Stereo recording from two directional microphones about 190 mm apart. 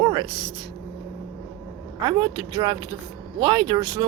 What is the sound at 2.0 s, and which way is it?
Speech, 25° right (ahead or behind).